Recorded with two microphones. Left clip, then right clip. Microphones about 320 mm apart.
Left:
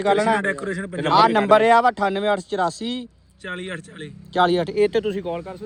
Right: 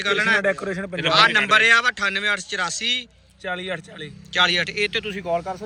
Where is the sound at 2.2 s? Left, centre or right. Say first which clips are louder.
Left 1 dB; centre.